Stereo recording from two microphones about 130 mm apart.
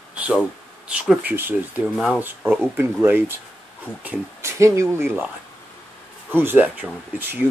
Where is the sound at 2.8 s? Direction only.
15° right (ahead or behind).